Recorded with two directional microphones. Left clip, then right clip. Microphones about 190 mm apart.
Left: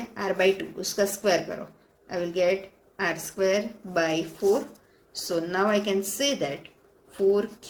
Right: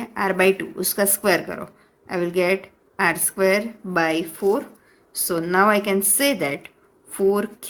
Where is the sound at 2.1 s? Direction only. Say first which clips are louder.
Right 4 dB; 55° right (ahead or behind).